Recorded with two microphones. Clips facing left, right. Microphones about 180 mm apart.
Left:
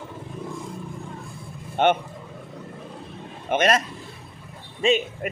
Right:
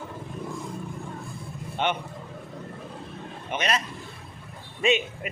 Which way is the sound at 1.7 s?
50° left (ahead or behind).